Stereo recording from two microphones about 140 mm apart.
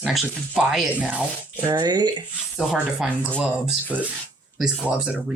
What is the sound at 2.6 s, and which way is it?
Speech, 5° right (ahead or behind).